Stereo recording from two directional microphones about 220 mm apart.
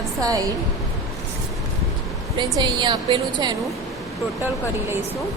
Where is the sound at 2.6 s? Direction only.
20° right (ahead or behind).